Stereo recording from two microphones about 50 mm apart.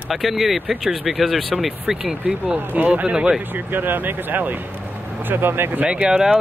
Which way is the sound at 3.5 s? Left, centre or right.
Right.